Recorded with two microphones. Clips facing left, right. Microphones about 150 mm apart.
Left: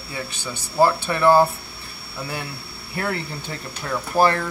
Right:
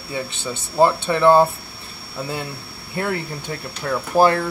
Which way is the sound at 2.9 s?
15° right (ahead or behind).